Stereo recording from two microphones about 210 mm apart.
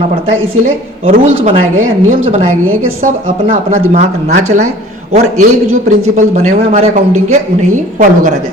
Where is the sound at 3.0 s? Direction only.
35° right (ahead or behind).